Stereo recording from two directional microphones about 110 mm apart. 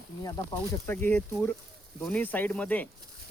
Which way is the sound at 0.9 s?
15° left (ahead or behind).